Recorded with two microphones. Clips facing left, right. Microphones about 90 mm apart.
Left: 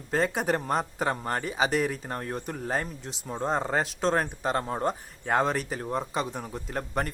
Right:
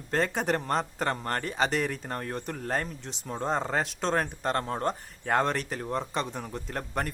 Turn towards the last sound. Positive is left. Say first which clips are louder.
# left 2 dB
turn(degrees=0)  # may be behind; listen again after turning